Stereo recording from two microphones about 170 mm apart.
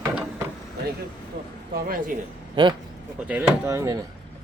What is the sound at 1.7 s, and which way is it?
Speech, 55° right (ahead or behind).